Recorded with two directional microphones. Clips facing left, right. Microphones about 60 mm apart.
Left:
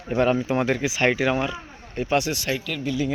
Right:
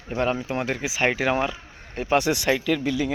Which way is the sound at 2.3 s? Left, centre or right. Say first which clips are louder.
Right 5 dB; right.